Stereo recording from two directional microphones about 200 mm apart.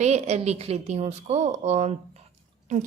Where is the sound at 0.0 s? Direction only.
35° right (ahead or behind).